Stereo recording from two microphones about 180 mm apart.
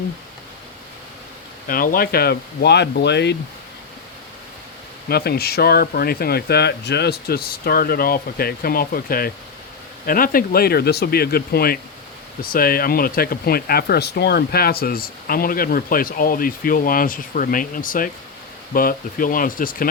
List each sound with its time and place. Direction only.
1.6 s speech: 50° left (ahead or behind); by 3.3 s 70° left (ahead or behind)
5.0 s speech: 60° left (ahead or behind)